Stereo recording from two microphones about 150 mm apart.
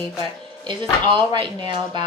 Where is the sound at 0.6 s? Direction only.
30° right (ahead or behind).